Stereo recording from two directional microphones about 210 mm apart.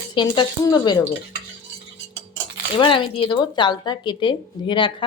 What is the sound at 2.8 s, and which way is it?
Speech, 25° left (ahead or behind).